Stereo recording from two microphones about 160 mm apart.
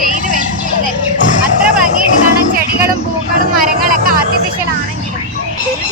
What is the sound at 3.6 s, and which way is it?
Vehicle, 60° right (ahead or behind).